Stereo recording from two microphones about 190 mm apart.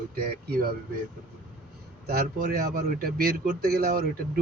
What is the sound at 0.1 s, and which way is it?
Speech, 55° right (ahead or behind).